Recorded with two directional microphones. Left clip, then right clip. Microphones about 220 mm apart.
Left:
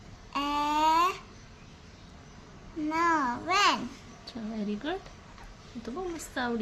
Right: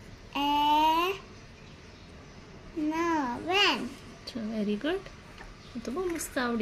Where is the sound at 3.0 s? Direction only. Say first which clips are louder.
Left 5 dB; 40° left (ahead or behind).